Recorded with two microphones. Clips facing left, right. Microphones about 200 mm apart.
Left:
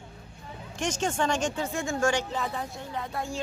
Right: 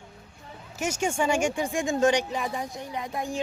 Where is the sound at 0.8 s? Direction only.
10° right (ahead or behind).